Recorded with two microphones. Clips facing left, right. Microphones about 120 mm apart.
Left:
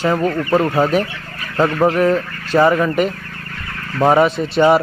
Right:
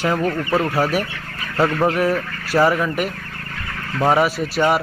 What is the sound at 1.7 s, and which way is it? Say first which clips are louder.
Goose: left 6 dB; 10° left (ahead or behind).